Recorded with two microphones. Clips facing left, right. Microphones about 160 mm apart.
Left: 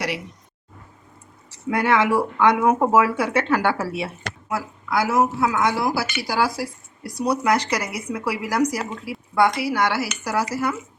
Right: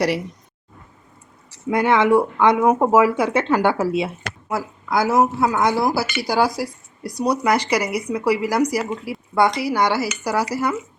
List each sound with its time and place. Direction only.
1.7 s speech: 20° right (ahead or behind)
5.4 s speech: 35° right (ahead or behind)
5.9 s speech: 20° right (ahead or behind)